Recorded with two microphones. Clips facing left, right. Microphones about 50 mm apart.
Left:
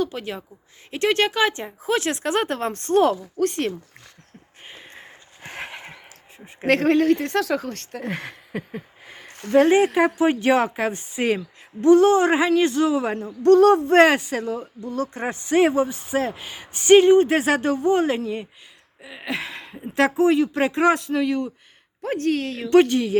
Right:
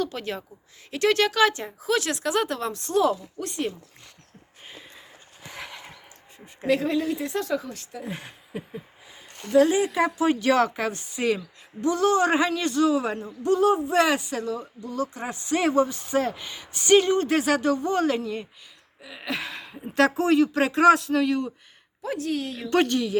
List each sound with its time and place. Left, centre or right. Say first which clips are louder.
0.0 s speech: left 2 dB; centre
0.9 s speech: left 1 dB; left
4.9 s a sound: left 4 dB; left
6.7 s speech: left 6 dB; left
9.5 s speech: left 4 dB; left
10.2 s speech: right 1 dB; left
13.4 s speech: left 7 dB; left
13.9 s speech: left 7 dB; left
15.7 s speech: even; centre
16.6 s speech: left 6 dB; left
19.0 s a sound: left 2 dB; centre
20.0 s speech: left 2 dB; centre
22.0 s speech: left 5 dB; left
22.9 s speech: left 3 dB; left